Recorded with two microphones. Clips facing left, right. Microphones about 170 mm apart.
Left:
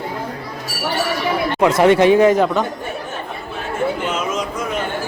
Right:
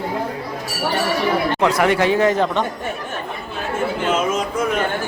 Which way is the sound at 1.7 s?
25° left (ahead or behind).